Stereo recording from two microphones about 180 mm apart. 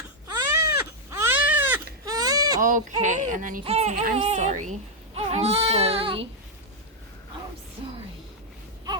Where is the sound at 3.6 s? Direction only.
35° right (ahead or behind).